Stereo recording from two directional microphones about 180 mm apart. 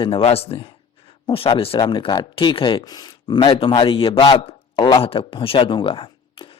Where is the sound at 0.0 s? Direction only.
30° left (ahead or behind).